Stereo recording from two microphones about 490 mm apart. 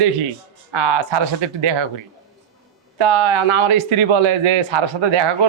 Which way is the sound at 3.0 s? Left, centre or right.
Right.